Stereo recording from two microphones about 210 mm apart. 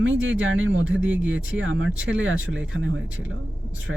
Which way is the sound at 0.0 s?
65° right (ahead or behind).